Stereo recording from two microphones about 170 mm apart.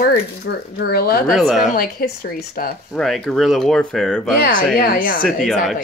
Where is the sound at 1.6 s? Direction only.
55° left (ahead or behind).